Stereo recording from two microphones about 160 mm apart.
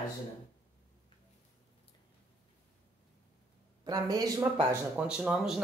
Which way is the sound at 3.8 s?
25° right (ahead or behind).